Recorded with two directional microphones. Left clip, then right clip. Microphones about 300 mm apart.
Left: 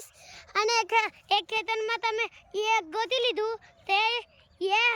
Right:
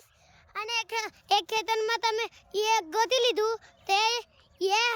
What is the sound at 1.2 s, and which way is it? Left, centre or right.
A child's voice, centre.